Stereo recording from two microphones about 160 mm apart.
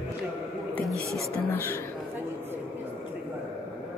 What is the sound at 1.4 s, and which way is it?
Speech, 15° left (ahead or behind).